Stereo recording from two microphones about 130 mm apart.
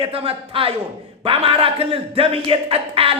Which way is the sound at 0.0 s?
45° right (ahead or behind).